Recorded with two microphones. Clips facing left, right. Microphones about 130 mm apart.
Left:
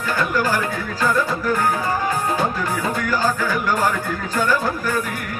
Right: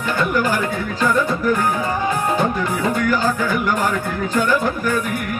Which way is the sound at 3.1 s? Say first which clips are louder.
Right 2 dB; 20° right (ahead or behind).